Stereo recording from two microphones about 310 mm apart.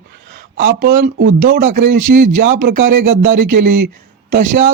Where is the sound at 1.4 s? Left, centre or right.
Right.